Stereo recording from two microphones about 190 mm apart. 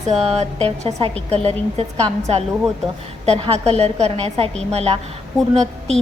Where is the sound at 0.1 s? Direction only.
35° right (ahead or behind).